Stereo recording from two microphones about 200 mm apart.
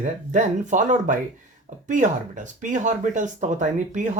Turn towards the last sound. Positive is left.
turn(degrees=-40)  # may be behind; listen again after turning